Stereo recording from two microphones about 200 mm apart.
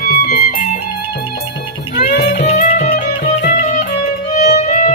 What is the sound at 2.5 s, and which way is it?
Music, 35° left (ahead or behind).